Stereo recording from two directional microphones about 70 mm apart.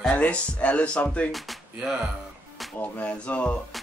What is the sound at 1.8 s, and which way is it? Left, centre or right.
Speech, centre.